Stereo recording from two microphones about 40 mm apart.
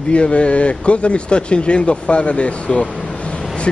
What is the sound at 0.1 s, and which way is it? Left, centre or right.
A man's voice, left.